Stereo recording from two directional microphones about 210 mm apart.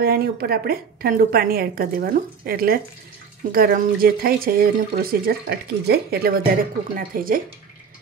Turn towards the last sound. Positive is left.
turn(degrees=-40)  # may be behind; listen again after turning